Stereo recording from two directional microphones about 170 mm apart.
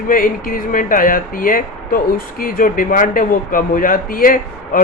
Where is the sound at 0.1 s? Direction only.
55° left (ahead or behind).